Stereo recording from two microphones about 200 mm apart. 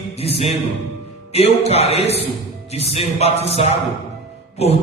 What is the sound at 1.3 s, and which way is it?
Speech, 30° left (ahead or behind).